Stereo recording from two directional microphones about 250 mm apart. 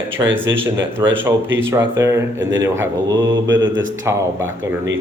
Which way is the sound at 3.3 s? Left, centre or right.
Right.